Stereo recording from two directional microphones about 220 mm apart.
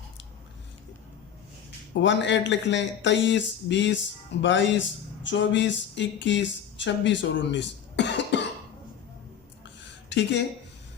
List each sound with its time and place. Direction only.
2.0 s speech: 55° left (ahead or behind)
10.1 s speech: 50° left (ahead or behind)